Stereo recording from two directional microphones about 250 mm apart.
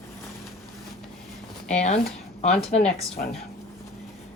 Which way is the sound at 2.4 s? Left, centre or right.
Left.